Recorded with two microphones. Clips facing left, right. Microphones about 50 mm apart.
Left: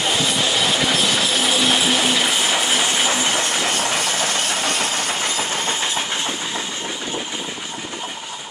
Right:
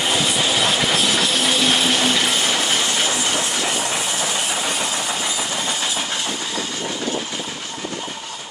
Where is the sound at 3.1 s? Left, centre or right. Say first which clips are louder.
Left 2 dB; left.